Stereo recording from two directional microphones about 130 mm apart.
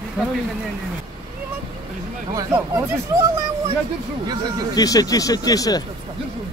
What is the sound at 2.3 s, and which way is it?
Speech, 25° right (ahead or behind).